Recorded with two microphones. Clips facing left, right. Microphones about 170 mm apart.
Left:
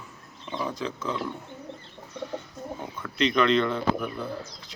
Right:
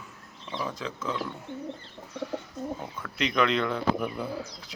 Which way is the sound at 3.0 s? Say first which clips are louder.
Left 3 dB; 5° right (ahead or behind).